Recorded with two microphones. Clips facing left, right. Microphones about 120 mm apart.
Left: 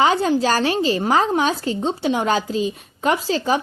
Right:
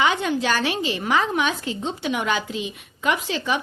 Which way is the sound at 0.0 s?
35° left (ahead or behind).